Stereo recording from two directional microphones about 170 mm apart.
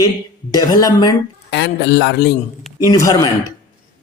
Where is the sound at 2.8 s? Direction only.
20° left (ahead or behind).